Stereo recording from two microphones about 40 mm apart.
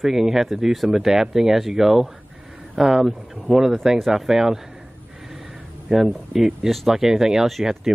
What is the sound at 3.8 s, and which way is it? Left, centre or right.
Speech, centre.